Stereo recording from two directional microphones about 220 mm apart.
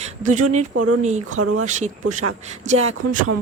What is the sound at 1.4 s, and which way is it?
Speech, 90° right.